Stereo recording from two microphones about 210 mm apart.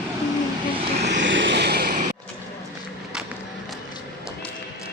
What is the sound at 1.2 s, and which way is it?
Vehicle, 60° right (ahead or behind).